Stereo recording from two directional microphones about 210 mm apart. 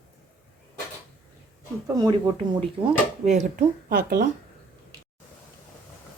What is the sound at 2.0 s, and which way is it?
Speech, 20° right (ahead or behind).